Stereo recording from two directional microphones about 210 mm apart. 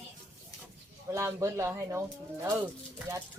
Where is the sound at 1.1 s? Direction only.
15° right (ahead or behind).